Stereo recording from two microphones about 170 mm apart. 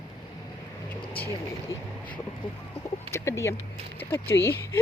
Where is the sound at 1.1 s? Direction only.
10° left (ahead or behind).